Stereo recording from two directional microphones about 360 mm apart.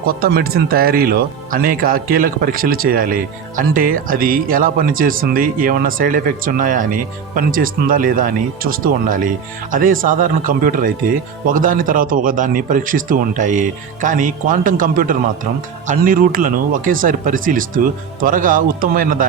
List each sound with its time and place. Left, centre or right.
0.2 s speech: right